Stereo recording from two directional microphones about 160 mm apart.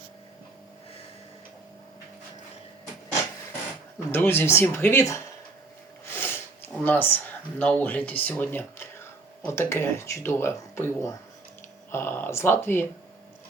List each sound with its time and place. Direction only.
4.1 s speech: 15° left (ahead or behind)
6.1 s snort: 15° left (ahead or behind)
7.6 s speech: 10° left (ahead or behind)